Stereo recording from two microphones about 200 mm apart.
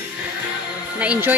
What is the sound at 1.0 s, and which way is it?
Speech, 5° right (ahead or behind).